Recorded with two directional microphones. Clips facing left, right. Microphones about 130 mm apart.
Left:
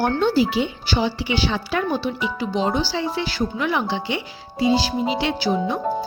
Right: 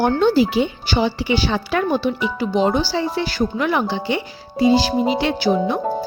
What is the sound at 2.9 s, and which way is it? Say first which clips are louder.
Speech: right 3 dB; 45° right (ahead or behind).